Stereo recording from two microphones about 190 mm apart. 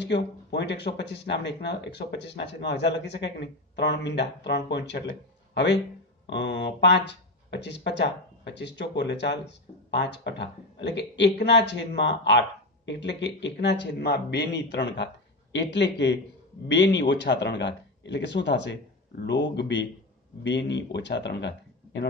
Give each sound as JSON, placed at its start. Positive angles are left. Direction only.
{"t": 0.0, "sound": "a man's voice", "side_deg": 65}